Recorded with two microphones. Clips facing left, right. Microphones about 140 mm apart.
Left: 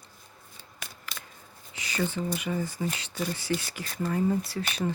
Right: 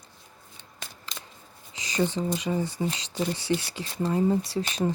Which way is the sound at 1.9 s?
25° right (ahead or behind).